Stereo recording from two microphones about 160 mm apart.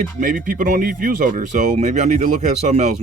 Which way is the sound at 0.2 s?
55° right (ahead or behind).